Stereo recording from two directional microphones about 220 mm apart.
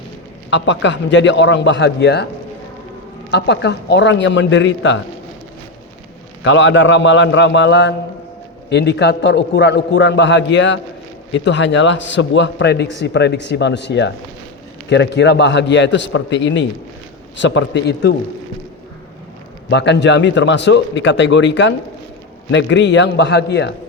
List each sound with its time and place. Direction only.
0.5 s a man's voice: 55° left (ahead or behind)
3.3 s a man's voice: 50° left (ahead or behind)
6.4 s a man's voice: 55° left (ahead or behind)
19.7 s a man's voice: 50° left (ahead or behind)